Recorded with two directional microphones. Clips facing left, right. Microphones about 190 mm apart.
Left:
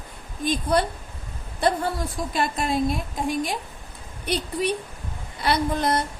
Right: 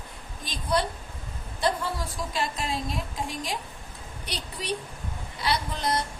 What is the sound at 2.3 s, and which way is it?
Speech, 55° left (ahead or behind).